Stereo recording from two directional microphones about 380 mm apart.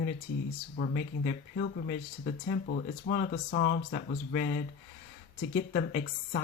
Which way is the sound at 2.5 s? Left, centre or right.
Left.